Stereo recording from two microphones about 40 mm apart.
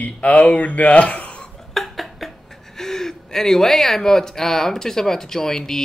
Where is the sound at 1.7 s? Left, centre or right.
Centre.